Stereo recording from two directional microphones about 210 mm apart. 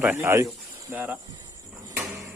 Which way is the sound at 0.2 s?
10° right (ahead or behind).